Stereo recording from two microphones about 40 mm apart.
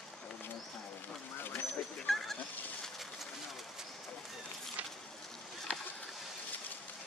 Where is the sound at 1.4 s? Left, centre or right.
Left.